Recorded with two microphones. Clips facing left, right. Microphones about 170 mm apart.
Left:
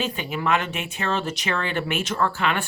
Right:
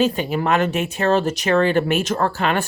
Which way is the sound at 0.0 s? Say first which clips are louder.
Right 7 dB; 40° right (ahead or behind).